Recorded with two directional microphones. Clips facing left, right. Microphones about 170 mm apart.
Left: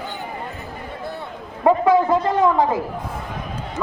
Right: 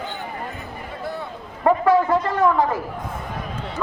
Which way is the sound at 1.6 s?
15° left (ahead or behind).